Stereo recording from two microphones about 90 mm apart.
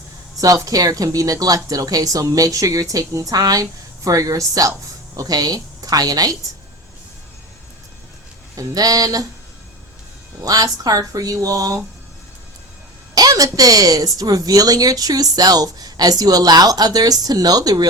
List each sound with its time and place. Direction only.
0.3 s a woman's voice: 40° right (ahead or behind)
8.5 s speech: 45° right (ahead or behind)
10.4 s speech: 45° right (ahead or behind)
13.1 s speech: 45° right (ahead or behind)